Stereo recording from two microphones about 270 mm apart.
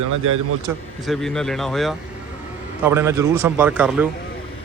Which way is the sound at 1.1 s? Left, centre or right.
Centre.